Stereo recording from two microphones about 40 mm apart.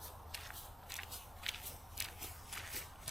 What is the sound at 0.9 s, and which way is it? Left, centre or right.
Walk, centre.